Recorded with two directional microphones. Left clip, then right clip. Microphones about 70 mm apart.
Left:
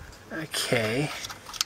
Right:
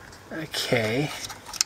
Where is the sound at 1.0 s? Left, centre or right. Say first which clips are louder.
Right 1 dB; centre.